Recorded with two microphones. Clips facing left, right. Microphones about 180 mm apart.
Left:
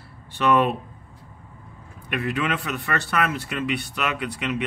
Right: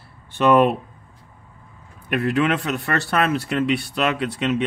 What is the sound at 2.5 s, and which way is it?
Speech, 25° right (ahead or behind).